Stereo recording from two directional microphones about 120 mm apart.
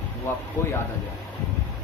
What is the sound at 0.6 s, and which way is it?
Speech, 20° left (ahead or behind).